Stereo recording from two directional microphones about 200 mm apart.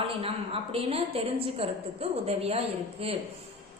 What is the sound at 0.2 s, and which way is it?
A woman's voice, 30° right (ahead or behind).